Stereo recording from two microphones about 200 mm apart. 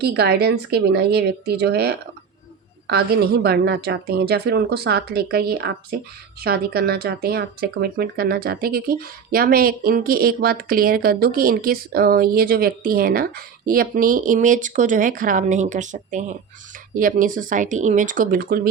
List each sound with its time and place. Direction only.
0.0 s speech: 50° right (ahead or behind)